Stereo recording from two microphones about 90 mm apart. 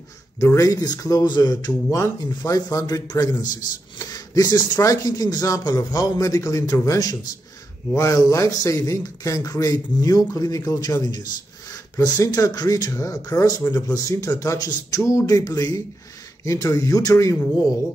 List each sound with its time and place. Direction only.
0.4 s speech: 40° left (ahead or behind)
2.0 s speech: 35° left (ahead or behind)